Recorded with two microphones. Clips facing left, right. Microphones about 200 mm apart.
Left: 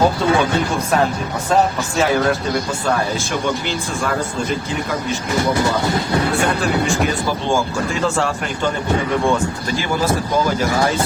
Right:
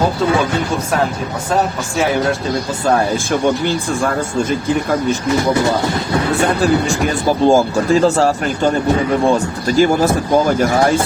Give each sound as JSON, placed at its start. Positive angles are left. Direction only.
{"t": 6.8, "sound": "speech", "side_deg": -40}